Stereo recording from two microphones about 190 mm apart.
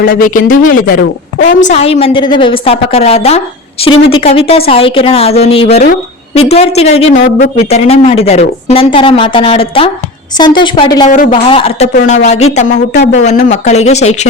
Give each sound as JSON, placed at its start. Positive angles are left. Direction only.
{"t": 0.0, "sound": "a woman's voice", "side_deg": 45}